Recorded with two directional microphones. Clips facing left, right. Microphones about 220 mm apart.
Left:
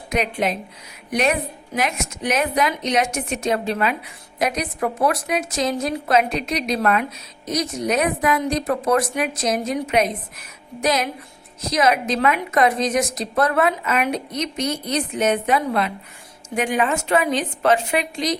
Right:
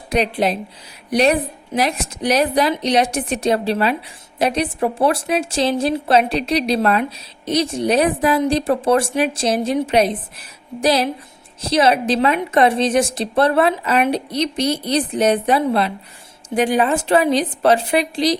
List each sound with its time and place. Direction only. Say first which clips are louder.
0.1 s a woman's voice: right 4 dB; 35° right (ahead or behind)